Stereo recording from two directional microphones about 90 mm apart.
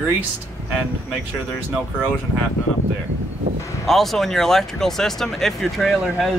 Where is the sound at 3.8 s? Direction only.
5° left (ahead or behind).